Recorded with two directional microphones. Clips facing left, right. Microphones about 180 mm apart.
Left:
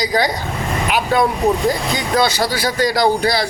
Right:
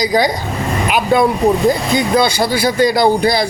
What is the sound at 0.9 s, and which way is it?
Vehicle, 15° right (ahead or behind).